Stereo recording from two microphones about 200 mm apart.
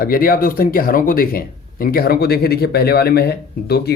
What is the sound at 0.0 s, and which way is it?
Speech, 45° left (ahead or behind).